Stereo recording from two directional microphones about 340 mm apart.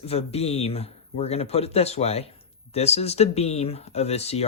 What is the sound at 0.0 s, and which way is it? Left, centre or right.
Speech, centre.